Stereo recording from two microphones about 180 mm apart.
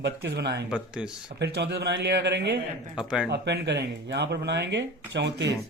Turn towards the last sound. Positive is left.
turn(degrees=-75)  # may be behind; listen again after turning